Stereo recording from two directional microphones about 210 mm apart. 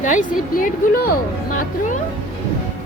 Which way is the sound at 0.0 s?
35° left (ahead or behind).